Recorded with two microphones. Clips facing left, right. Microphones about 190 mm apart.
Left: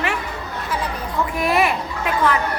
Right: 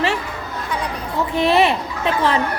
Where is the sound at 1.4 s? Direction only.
30° right (ahead or behind).